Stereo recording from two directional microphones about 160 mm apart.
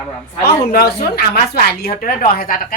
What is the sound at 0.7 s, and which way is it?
A woman's voice, 70° left (ahead or behind).